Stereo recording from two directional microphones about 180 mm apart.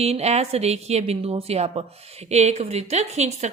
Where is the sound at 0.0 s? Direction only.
35° right (ahead or behind).